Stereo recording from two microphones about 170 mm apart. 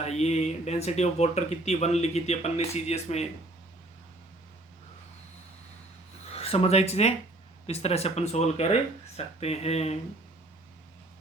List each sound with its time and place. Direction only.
0.0 s speech: 40° left (ahead or behind)
6.3 s speech: 35° left (ahead or behind)